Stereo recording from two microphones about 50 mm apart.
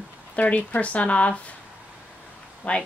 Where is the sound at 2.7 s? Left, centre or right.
Left.